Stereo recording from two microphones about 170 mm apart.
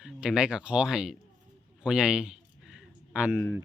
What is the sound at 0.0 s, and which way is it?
Speech, 5° right (ahead or behind).